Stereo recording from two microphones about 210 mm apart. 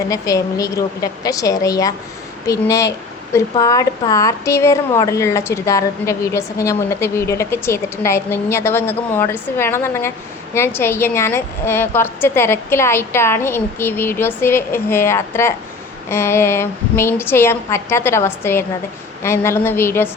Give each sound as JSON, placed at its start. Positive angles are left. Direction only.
{"t": 0.1, "sound": "a woman's voice", "side_deg": 15}